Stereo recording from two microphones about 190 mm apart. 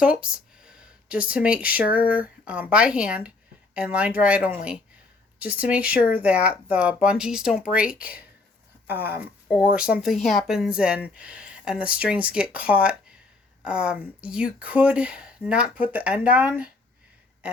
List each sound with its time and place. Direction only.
0.0 s speech: 5° right (ahead or behind)
2.0 s speech: 50° left (ahead or behind)
2.2 s speech: 5° right (ahead or behind)